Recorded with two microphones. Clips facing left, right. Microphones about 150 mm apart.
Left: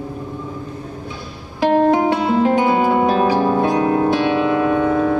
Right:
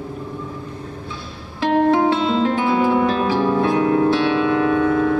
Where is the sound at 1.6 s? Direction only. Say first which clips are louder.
Left 2 dB; 15° left (ahead or behind).